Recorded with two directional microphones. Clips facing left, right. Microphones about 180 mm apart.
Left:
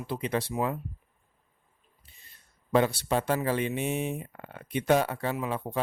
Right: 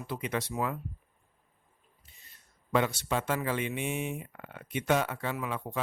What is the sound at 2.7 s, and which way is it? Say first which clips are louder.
Speech: left 4 dB; 35° left (ahead or behind).